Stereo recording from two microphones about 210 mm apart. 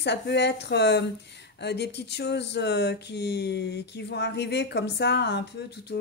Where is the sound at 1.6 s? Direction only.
50° left (ahead or behind).